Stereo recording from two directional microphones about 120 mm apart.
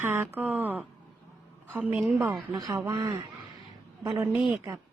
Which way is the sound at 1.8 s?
10° right (ahead or behind).